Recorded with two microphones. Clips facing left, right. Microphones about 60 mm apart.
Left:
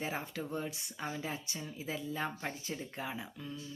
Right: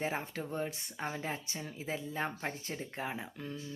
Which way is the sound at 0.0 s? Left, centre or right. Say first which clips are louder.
Right 2 dB; right.